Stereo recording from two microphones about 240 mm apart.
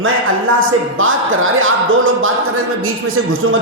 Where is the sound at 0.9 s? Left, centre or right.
Right.